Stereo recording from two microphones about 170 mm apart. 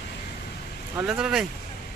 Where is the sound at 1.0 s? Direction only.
5° right (ahead or behind).